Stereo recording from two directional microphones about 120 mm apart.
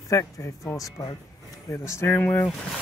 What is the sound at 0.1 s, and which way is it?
Speech, 25° left (ahead or behind).